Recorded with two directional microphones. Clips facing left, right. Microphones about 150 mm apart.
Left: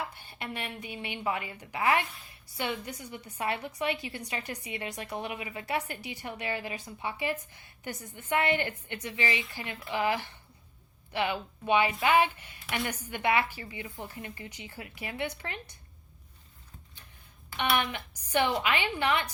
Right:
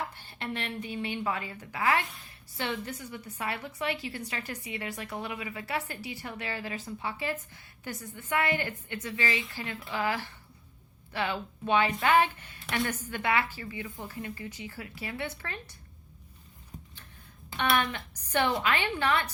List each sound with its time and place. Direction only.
0.1 s a woman's voice: 10° left (ahead or behind)
17.6 s a woman's voice: 15° left (ahead or behind)